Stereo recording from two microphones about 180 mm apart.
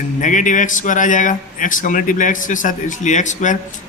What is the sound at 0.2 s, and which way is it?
A man's voice, 45° left (ahead or behind).